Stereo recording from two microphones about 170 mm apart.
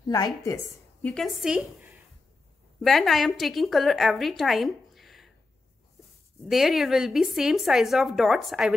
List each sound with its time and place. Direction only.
0.0 s a woman's voice: 20° left (ahead or behind)
1.0 s a woman's voice: centre (ahead or behind)
6.5 s a woman's voice: centre (ahead or behind)